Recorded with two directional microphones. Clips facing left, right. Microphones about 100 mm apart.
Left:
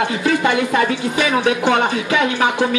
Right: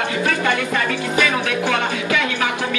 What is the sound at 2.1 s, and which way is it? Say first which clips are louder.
Speech: left 5 dB; 30° left (ahead or behind).